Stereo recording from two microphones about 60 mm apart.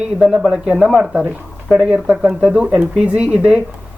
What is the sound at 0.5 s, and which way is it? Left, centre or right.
Speech, centre.